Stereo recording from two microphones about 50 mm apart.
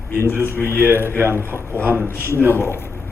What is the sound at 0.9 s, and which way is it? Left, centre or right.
Speech, right.